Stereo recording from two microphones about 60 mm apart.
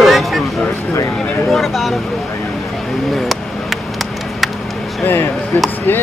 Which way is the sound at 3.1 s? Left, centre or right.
Centre.